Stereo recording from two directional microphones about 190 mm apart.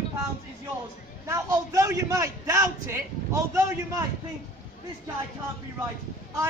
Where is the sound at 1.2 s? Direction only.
15° right (ahead or behind).